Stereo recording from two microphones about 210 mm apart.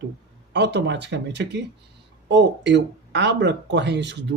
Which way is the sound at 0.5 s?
55° right (ahead or behind).